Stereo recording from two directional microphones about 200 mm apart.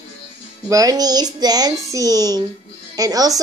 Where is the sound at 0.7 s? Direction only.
20° right (ahead or behind).